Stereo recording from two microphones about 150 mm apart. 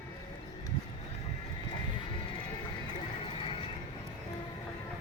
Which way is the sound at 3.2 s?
35° left (ahead or behind).